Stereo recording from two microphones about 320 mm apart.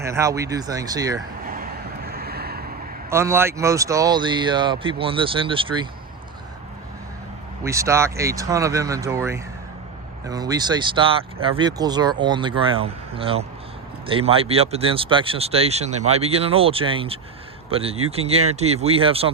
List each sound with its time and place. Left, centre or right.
0.0 s speech: centre
1.5 s vehicle: right
3.1 s speech: centre
7.6 s speech: centre